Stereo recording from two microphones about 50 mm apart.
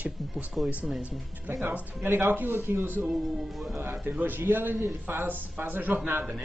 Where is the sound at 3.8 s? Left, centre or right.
Right.